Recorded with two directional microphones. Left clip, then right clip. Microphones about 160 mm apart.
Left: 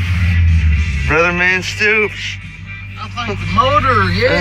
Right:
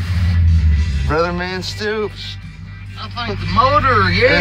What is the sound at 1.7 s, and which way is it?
Speech, centre (ahead or behind).